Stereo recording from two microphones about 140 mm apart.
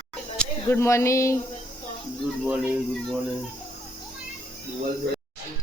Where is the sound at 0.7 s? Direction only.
20° left (ahead or behind).